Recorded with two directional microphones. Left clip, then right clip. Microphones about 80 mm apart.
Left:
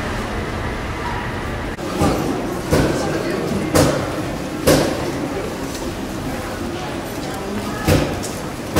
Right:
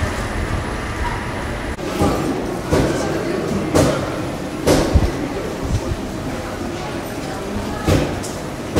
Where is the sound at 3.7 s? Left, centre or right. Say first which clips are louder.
Even; left.